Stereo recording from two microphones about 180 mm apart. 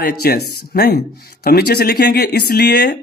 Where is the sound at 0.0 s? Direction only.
60° left (ahead or behind).